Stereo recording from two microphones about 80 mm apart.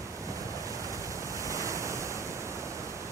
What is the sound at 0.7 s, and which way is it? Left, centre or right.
Waterfall, right.